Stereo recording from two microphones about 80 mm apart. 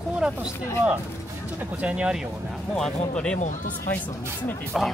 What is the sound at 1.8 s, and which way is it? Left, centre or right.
Speech, centre.